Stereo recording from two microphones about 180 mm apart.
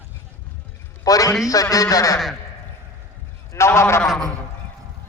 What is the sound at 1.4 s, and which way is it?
Speech, 20° left (ahead or behind).